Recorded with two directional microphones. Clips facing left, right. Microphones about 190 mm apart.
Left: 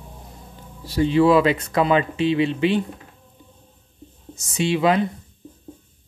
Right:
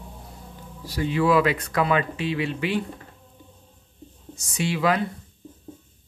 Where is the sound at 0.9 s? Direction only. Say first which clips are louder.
Left 5 dB; 30° left (ahead or behind).